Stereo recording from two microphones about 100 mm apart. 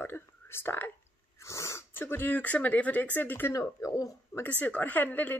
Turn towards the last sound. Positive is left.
turn(degrees=20)  # may be behind; listen again after turning